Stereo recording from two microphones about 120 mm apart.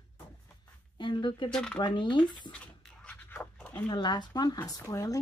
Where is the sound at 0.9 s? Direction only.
40° left (ahead or behind).